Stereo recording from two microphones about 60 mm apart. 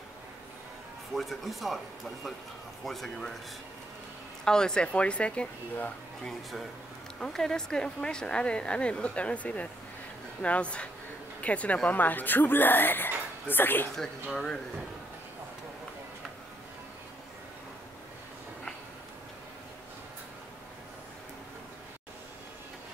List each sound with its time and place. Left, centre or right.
1.1 s speech: centre
4.5 s speech: centre; by 13.8 s left
13.9 s speech: centre